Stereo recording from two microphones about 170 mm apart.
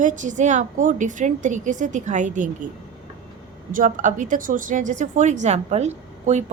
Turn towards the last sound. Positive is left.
turn(degrees=-40)  # may be behind; listen again after turning